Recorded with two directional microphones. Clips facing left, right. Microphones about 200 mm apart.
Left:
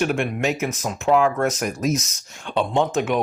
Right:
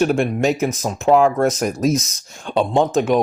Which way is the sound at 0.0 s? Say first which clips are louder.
Right 5 dB; 35° right (ahead or behind).